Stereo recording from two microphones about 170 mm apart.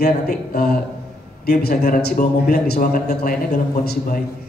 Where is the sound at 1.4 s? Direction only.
65° left (ahead or behind).